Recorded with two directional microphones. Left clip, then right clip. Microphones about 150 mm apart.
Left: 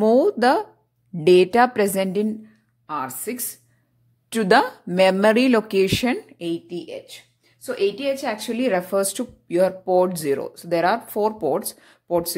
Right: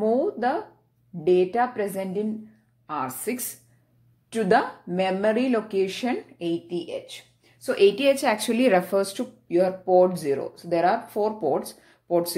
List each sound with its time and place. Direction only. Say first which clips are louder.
0.0 s a woman's voice: left 6 dB; 90° left; by 2.2 s 75° left (ahead or behind)
2.9 s a woman's voice: left 1 dB; 25° left (ahead or behind)
4.3 s speech: left 4 dB; 60° left (ahead or behind)
6.3 s a woman's voice: even; 35° left (ahead or behind)
7.7 s a woman's voice: right 3 dB; 10° right (ahead or behind); by 8.8 s 5° left (ahead or behind)
8.9 s speech: left 2 dB; 35° left (ahead or behind)